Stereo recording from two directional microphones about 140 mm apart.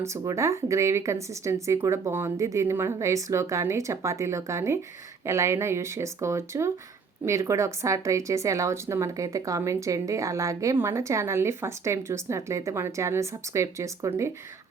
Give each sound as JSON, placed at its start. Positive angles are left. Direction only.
{"t": 0.0, "sound": "a woman's voice", "side_deg": -20}